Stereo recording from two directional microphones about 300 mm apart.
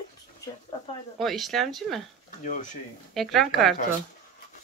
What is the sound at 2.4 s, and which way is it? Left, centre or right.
Speech, left.